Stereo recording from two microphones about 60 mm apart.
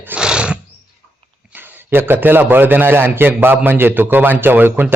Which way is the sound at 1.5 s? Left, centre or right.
Right.